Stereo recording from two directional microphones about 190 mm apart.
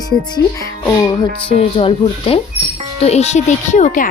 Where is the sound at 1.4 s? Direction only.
30° left (ahead or behind).